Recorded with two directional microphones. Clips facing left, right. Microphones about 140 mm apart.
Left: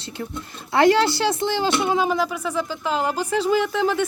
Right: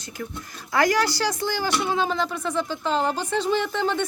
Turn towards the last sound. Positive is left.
turn(degrees=5)  # may be behind; listen again after turning